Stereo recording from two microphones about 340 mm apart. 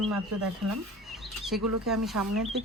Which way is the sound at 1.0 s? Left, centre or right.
Centre.